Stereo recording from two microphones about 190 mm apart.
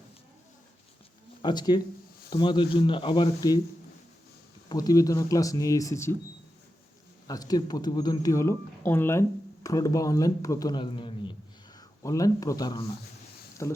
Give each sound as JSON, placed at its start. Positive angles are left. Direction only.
{"t": 1.4, "sound": "speech", "side_deg": 25}
{"t": 4.7, "sound": "a man's voice", "side_deg": 20}
{"t": 7.3, "sound": "a man's voice", "side_deg": 20}